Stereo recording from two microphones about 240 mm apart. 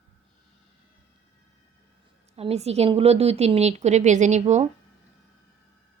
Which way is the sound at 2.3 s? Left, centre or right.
Right.